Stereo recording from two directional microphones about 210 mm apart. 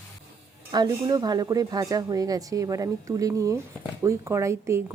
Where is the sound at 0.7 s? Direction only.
20° right (ahead or behind).